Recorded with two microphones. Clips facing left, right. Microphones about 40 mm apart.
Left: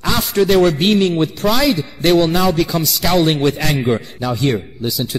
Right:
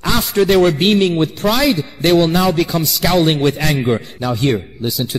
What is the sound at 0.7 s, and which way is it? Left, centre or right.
Speech, right.